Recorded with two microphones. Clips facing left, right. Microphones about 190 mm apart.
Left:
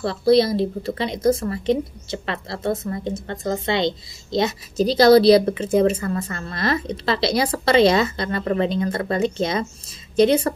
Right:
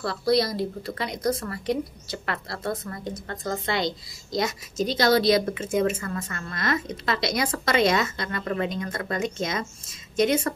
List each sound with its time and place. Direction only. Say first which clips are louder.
0.0 s speech: left 6 dB; 25° left (ahead or behind)